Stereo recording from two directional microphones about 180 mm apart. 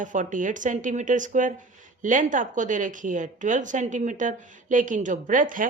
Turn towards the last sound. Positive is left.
turn(degrees=-45)  # may be behind; listen again after turning